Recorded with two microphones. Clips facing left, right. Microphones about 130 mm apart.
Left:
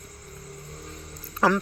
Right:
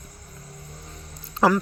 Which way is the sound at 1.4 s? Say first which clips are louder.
Right 3 dB; 25° right (ahead or behind).